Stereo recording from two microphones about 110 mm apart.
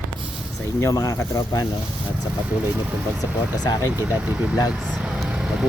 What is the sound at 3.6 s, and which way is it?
Speech, 35° left (ahead or behind).